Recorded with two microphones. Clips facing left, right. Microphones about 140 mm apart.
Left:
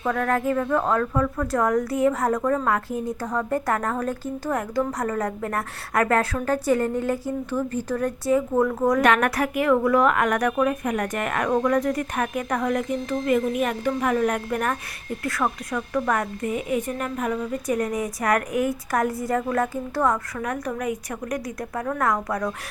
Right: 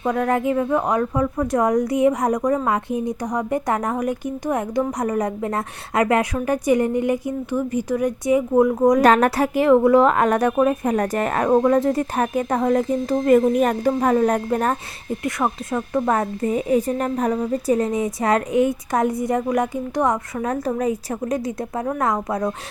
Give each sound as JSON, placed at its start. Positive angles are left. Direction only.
{"t": 0.0, "sound": "speech", "side_deg": -20}
{"t": 9.0, "sound": "speech", "side_deg": -35}